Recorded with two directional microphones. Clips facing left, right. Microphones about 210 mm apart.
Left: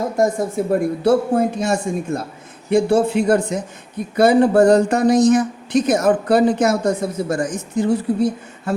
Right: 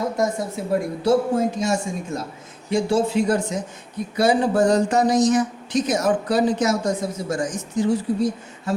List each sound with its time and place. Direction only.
0.2 s speech: 50° left (ahead or behind)